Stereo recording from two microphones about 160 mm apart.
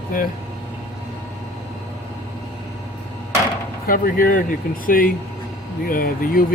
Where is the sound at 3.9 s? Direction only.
60° left (ahead or behind).